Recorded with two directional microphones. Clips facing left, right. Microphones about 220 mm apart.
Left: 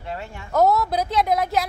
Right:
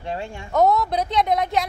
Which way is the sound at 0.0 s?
25° right (ahead or behind).